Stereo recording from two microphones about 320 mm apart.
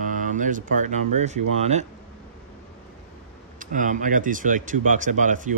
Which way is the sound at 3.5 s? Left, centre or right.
Right.